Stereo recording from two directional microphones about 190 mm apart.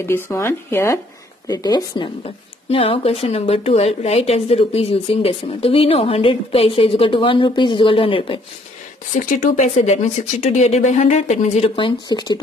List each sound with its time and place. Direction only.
0.0 s a woman's voice: 15° left (ahead or behind)
9.2 s speech: 40° left (ahead or behind); by 12.4 s 20° left (ahead or behind)